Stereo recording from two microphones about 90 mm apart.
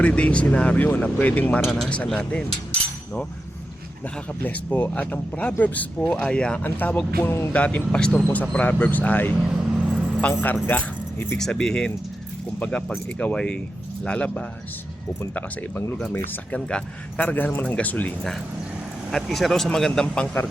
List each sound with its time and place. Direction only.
0.0 s speech: 15° left (ahead or behind)
1.6 s speech: centre (ahead or behind)
4.4 s speech: 20° left (ahead or behind)
7.5 s speech: 15° left (ahead or behind)
9.4 s vehicle: 10° right (ahead or behind)
10.2 s speech: 20° left (ahead or behind)
11.3 s speech: 5° left (ahead or behind)
16.0 s speech: 20° left (ahead or behind)
16.6 s speech: 10° left (ahead or behind)
19.1 s speech: centre (ahead or behind)